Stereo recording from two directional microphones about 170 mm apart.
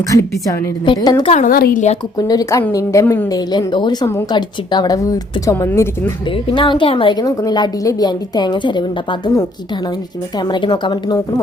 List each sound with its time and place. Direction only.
0.1 s a woman's voice: 20° left (ahead or behind)
1.3 s a woman's voice: 45° left (ahead or behind)
1.5 s a woman's voice: 60° left (ahead or behind)
2.1 s a woman's voice: 20° left (ahead or behind)
6.5 s a woman's voice: 30° left (ahead or behind)
10.5 s a woman's voice: 25° left (ahead or behind)